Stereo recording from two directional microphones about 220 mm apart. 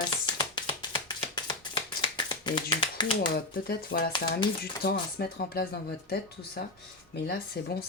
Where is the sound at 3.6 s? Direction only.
45° left (ahead or behind).